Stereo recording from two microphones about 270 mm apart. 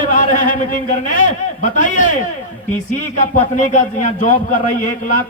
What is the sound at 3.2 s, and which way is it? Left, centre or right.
A man's voice, left.